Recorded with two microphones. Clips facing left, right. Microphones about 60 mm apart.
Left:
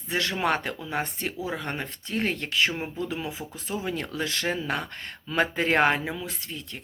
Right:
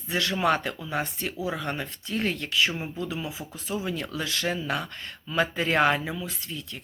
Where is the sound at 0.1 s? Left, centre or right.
Left.